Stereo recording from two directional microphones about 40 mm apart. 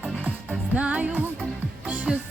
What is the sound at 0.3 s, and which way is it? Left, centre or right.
Music, right.